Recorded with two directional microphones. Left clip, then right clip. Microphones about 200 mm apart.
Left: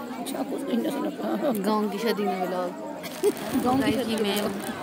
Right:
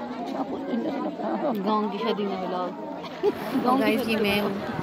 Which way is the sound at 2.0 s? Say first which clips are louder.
Left 1 dB; 75° left (ahead or behind).